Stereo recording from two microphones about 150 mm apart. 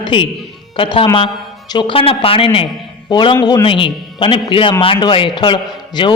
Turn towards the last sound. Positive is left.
turn(degrees=30)  # may be behind; listen again after turning